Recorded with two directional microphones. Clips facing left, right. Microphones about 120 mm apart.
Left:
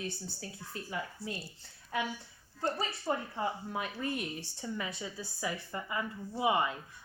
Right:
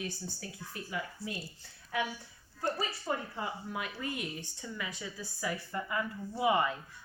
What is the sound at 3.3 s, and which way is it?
Speech, 30° left (ahead or behind).